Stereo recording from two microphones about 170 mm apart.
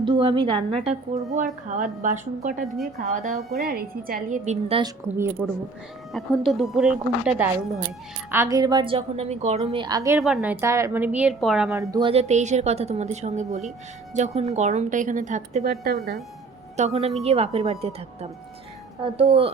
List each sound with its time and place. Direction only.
0.0 s a woman's voice: 30° right (ahead or behind); by 3.4 s 45° right (ahead or behind)
3.6 s a woman's voice: 65° right (ahead or behind)
4.7 s a woman's voice: 35° right (ahead or behind)
5.1 s a woman's voice: 15° right (ahead or behind)
6.1 s a woman's voice: centre (ahead or behind); by 9.8 s 40° right (ahead or behind)
9.8 s speech: 20° right (ahead or behind)
10.2 s a woman's voice: centre (ahead or behind)
11.8 s speech: 25° right (ahead or behind)
12.3 s a woman's voice: 45° right (ahead or behind)
15.7 s a woman's voice: 65° right (ahead or behind)
16.7 s a woman's voice: 40° right (ahead or behind)